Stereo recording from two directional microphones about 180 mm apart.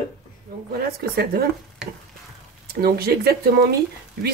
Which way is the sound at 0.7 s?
60° right (ahead or behind).